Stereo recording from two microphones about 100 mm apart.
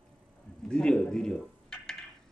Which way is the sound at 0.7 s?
10° left (ahead or behind).